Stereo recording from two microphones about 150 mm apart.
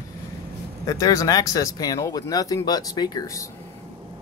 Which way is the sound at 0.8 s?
25° left (ahead or behind).